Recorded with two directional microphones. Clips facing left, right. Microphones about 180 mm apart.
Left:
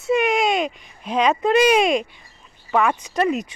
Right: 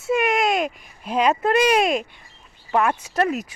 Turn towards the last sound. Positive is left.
turn(degrees=-5)  # may be behind; listen again after turning